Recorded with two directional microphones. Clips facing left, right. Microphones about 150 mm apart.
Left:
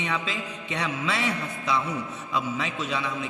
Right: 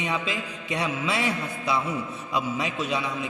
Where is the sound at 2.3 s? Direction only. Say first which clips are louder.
Right 1 dB; 10° right (ahead or behind).